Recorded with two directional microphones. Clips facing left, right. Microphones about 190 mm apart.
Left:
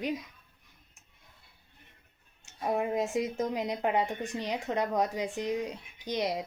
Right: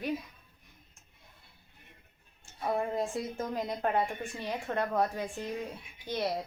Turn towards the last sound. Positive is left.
turn(degrees=15)  # may be behind; listen again after turning